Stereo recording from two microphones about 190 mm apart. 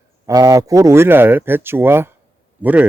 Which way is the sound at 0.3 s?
20° right (ahead or behind).